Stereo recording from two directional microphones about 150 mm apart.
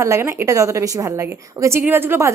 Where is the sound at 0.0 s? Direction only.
20° right (ahead or behind).